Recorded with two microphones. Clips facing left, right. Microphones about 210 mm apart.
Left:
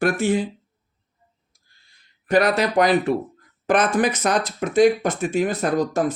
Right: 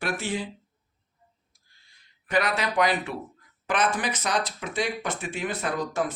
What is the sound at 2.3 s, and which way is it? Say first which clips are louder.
Speech: left 8 dB; 40° left (ahead or behind).